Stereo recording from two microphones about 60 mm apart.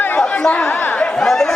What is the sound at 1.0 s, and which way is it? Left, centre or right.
Chatter, centre.